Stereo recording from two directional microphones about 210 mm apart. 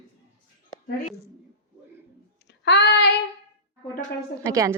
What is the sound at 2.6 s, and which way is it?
Child singing, 55° left (ahead or behind).